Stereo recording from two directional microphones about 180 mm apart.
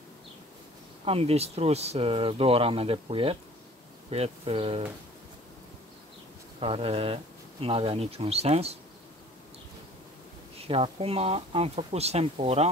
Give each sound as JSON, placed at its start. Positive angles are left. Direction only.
{"t": 1.0, "sound": "speech", "side_deg": -35}
{"t": 6.6, "sound": "speech", "side_deg": -30}
{"t": 10.7, "sound": "speech", "side_deg": -30}